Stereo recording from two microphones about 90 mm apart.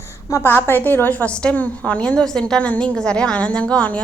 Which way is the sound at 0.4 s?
25° left (ahead or behind).